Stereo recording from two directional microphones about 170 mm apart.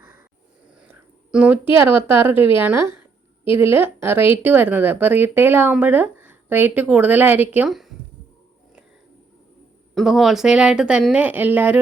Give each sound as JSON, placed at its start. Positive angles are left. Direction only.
{"t": 0.9, "sound": "a woman's voice", "side_deg": -10}
{"t": 9.9, "sound": "speech", "side_deg": 0}